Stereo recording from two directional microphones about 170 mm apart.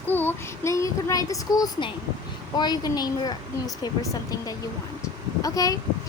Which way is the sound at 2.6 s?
25° left (ahead or behind).